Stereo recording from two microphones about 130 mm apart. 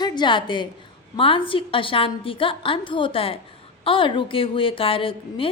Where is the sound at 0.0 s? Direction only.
35° left (ahead or behind).